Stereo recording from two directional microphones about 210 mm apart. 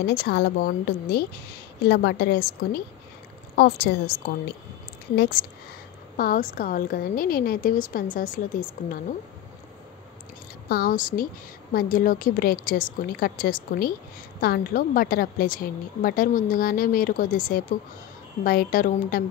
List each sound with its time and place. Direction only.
0.0 s a woman's voice: 50° left (ahead or behind)
5.1 s a woman's voice: 50° left (ahead or behind)
10.7 s a woman's voice: 45° left (ahead or behind)